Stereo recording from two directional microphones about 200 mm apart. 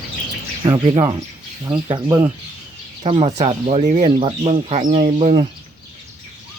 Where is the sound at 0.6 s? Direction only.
20° right (ahead or behind).